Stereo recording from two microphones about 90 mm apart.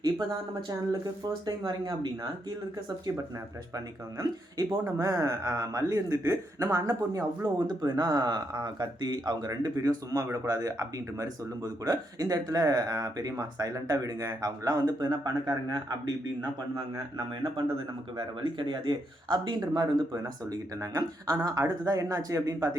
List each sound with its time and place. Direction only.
0.0 s a man's voice: 45° right (ahead or behind)
3.8 s a man's voice: 45° right (ahead or behind)
19.7 s speech: 45° right (ahead or behind)